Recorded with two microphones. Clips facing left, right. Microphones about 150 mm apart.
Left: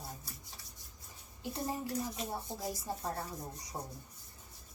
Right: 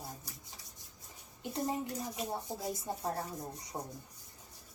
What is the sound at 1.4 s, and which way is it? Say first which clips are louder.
Speech: right 2 dB; 20° right (ahead or behind).